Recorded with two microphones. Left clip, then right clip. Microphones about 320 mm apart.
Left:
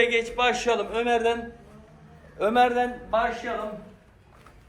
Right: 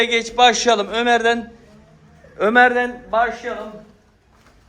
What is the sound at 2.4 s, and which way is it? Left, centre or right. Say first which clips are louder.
Speech: right 7 dB; right.